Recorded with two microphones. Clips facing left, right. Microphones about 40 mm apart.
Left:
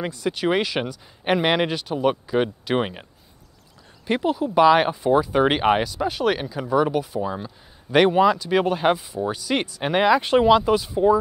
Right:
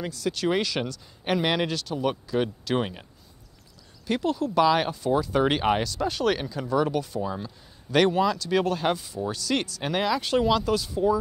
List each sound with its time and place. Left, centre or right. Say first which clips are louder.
0.0 s speech: left 3 dB; left
4.1 s speech: left 4 dB; centre